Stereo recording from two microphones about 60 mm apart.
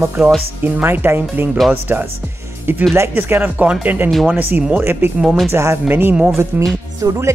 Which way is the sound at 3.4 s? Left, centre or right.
Right.